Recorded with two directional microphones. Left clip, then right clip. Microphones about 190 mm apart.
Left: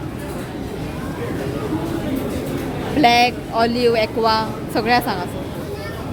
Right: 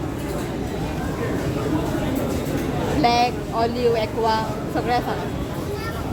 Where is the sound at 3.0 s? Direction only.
45° left (ahead or behind); by 5.1 s 60° left (ahead or behind).